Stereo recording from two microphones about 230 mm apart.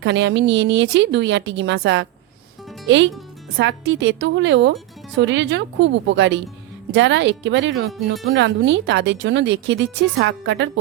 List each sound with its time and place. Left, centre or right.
0.0 s speech: right